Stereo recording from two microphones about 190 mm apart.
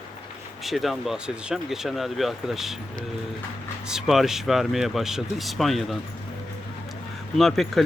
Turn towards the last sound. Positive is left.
turn(degrees=0)  # may be behind; listen again after turning